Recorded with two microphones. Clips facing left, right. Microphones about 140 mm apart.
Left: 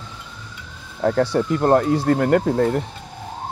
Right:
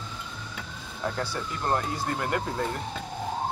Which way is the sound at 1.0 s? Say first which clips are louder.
Left 13 dB; 60° left (ahead or behind).